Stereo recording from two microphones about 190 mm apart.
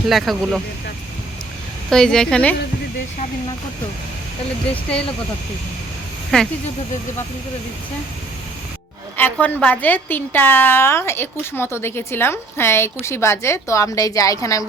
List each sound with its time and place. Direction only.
0.1 s speech: centre (ahead or behind)
1.9 s speech: 5° left (ahead or behind)
4.7 s speech: 5° left (ahead or behind)
6.3 s speech: 5° left (ahead or behind)
9.1 s a woman's voice: 10° left (ahead or behind)